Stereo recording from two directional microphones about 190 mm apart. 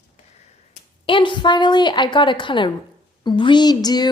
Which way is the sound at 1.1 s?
25° left (ahead or behind).